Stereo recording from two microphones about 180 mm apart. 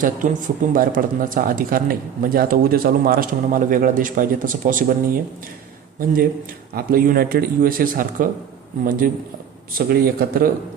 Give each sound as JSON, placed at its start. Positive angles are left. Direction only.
{"t": 0.0, "sound": "speech", "side_deg": -50}
{"t": 6.0, "sound": "a man's voice", "side_deg": -50}